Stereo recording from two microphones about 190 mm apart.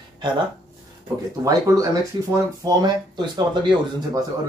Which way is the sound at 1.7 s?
20° right (ahead or behind).